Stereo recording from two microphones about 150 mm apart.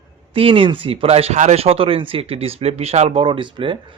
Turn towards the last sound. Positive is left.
turn(degrees=-35)  # may be behind; listen again after turning